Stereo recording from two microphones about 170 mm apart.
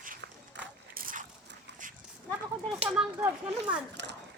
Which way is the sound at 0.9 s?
55° right (ahead or behind).